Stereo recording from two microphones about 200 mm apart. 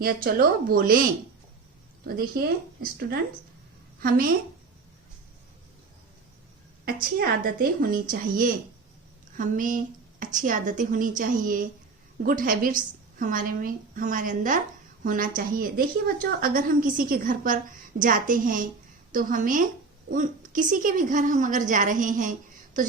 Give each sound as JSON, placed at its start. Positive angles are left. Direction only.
{"t": 0.0, "sound": "a woman's voice", "side_deg": -45}
{"t": 2.0, "sound": "a woman's voice", "side_deg": -50}
{"t": 6.8, "sound": "a woman's voice", "side_deg": -45}